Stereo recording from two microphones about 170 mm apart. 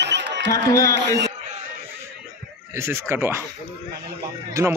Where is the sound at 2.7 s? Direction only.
15° right (ahead or behind).